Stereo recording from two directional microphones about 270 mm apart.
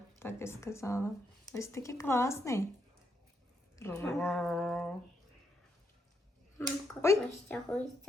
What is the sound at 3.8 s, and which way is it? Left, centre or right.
Speech, centre.